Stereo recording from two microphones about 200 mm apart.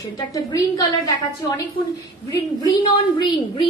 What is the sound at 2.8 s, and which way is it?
Speech, 25° left (ahead or behind).